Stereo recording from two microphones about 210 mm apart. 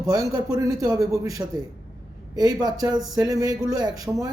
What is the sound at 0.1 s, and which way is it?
Speech, 15° right (ahead or behind).